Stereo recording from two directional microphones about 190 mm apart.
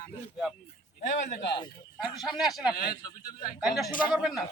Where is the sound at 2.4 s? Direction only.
Centre (ahead or behind).